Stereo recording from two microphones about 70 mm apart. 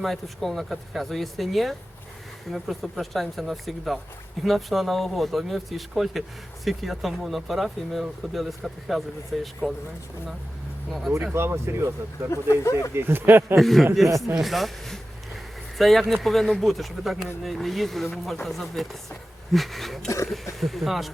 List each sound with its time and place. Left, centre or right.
0.0 s speech: centre
11.3 s speech: right
11.8 s speech: right
12.3 s speech: left
13.0 s speech: right
13.6 s speech: centre